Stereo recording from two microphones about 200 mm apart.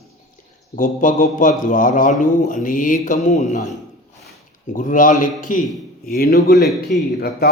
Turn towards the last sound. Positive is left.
turn(degrees=50)  # may be behind; listen again after turning